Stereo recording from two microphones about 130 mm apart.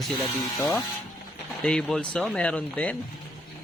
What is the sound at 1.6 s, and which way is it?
Speech, 5° left (ahead or behind).